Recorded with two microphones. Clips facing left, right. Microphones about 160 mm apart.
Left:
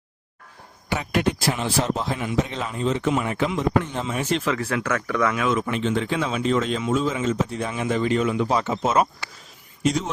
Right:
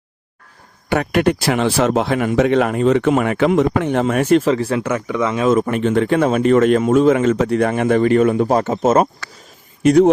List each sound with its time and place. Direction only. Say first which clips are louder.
0.9 s speech: right 7 dB; 60° right (ahead or behind)
4.4 s speech: right 7 dB; 30° right (ahead or behind)
5.5 s speech: right 8 dB; 45° right (ahead or behind)
9.8 s speech: right 12 dB; 60° right (ahead or behind)